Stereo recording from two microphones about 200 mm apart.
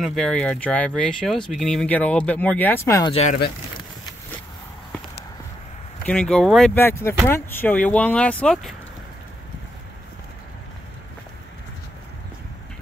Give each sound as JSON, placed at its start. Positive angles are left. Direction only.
{"t": 0.0, "sound": "speech", "side_deg": 0}
{"t": 3.1, "sound": "speech", "side_deg": 30}
{"t": 6.0, "sound": "speech", "side_deg": 5}